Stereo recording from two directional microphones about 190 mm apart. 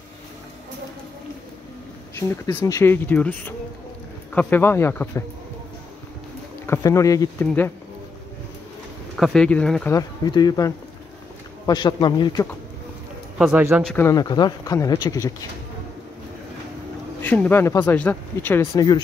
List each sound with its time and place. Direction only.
2.1 s speech: 15° left (ahead or behind)
6.6 s speech: 15° left (ahead or behind)
9.1 s speech: centre (ahead or behind)
9.9 s a man's voice: 20° left (ahead or behind)
13.4 s speech: 10° right (ahead or behind)
13.8 s a man's voice: 10° left (ahead or behind)
17.2 s speech: 10° left (ahead or behind)